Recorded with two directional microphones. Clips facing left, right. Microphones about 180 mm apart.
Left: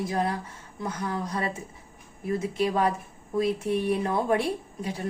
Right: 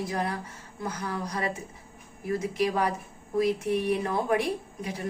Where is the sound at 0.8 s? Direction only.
25° left (ahead or behind).